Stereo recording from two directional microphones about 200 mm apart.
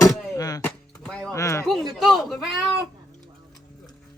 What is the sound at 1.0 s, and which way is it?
Music, 10° left (ahead or behind).